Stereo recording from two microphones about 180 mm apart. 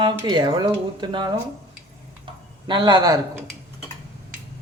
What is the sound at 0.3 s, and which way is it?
Speech, 20° right (ahead or behind).